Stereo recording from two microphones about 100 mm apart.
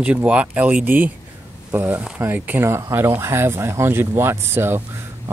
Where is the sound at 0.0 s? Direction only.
15° right (ahead or behind).